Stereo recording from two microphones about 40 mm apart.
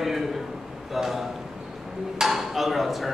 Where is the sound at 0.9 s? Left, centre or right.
Centre.